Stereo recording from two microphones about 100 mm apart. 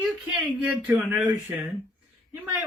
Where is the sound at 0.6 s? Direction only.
Centre (ahead or behind).